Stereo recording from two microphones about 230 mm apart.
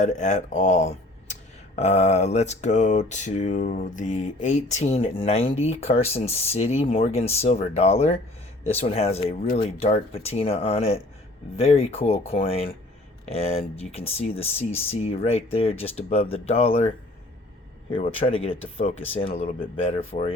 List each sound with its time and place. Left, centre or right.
0.0 s speech: left
17.9 s speech: left